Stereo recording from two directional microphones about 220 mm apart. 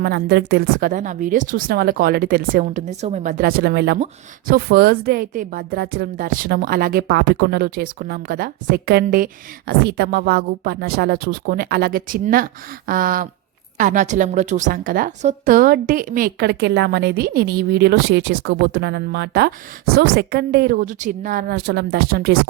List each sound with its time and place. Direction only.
0.0 s a woman's voice: 45° right (ahead or behind)